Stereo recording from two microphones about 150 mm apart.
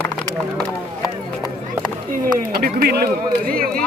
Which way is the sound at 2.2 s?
80° right.